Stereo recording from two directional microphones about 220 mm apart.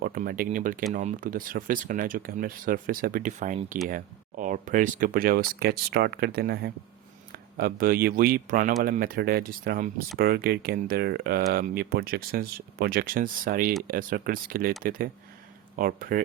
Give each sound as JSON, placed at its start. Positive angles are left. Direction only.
{"t": 0.0, "sound": "speech", "side_deg": -40}